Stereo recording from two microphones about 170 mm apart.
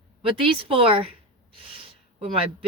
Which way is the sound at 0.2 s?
30° right (ahead or behind).